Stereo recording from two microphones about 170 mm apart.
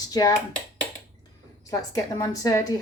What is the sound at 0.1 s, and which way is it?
Speech, 20° left (ahead or behind).